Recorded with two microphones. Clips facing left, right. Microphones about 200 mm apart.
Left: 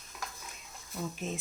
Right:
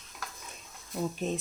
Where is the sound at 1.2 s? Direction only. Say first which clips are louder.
Right 5 dB; 35° right (ahead or behind).